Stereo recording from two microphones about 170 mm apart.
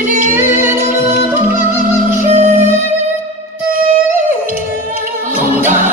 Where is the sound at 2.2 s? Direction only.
45° right (ahead or behind).